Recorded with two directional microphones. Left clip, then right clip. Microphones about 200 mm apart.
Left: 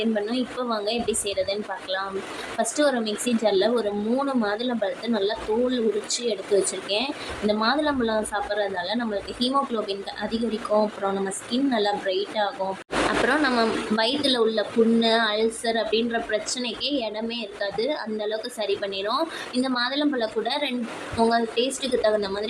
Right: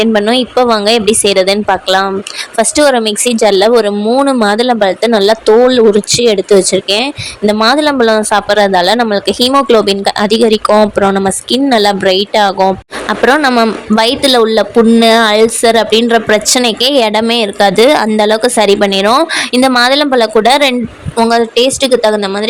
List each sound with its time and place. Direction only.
0.0 s speech: 55° right (ahead or behind)